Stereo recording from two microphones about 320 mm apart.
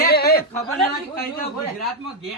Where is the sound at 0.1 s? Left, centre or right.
Left.